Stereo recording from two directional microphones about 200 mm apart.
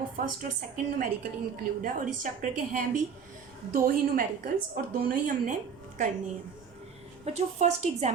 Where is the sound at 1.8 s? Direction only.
40° right (ahead or behind).